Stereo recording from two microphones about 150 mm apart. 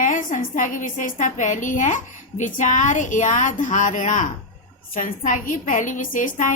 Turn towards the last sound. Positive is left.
turn(degrees=60)  # may be behind; listen again after turning